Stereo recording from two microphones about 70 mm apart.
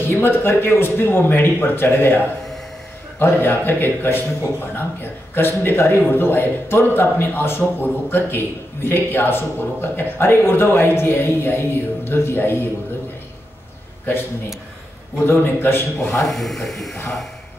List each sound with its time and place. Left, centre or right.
0.0 s a man's voice: left
15.2 s a man's voice: left
16.0 s speech: centre